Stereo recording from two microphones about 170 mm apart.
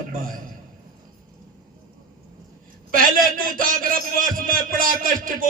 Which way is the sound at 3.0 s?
55° right (ahead or behind).